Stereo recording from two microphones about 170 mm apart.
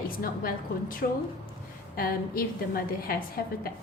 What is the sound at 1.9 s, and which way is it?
A woman's voice, 60° left (ahead or behind).